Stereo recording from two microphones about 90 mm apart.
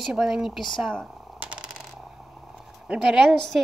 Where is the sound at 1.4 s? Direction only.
10° right (ahead or behind).